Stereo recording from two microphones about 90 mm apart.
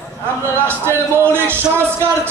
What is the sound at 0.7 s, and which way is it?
Speech, 25° right (ahead or behind).